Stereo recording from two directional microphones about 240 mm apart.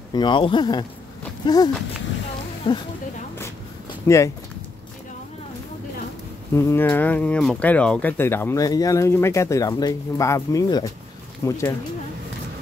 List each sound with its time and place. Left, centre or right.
0.1 s speech: centre
4.1 s speech: centre
6.5 s speech: centre